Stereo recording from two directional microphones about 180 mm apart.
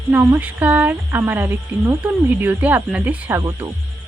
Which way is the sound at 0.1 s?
10° right (ahead or behind).